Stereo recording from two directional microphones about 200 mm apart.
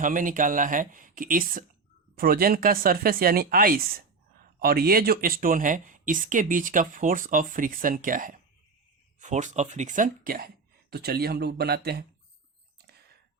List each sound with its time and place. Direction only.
0.0 s speech: 40° right (ahead or behind)